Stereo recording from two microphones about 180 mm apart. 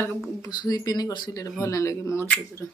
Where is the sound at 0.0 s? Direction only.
10° left (ahead or behind).